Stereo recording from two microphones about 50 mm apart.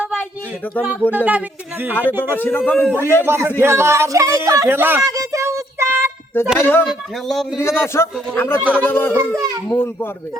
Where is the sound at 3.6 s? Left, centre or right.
Right.